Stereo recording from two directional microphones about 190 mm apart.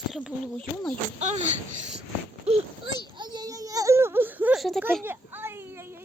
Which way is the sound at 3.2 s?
20° right (ahead or behind).